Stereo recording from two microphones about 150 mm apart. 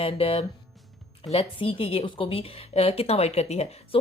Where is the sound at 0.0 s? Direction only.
40° left (ahead or behind).